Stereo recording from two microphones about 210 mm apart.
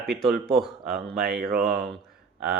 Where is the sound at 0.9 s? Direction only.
45° right (ahead or behind).